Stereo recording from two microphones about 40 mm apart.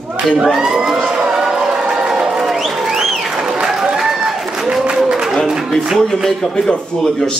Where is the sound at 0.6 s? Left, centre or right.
Centre.